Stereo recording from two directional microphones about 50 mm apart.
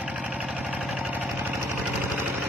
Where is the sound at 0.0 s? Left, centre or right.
Right.